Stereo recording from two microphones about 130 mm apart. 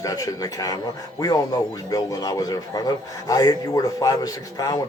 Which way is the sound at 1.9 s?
30° left (ahead or behind).